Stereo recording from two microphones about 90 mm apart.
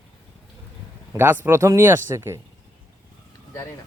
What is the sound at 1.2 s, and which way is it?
Speech, 25° right (ahead or behind).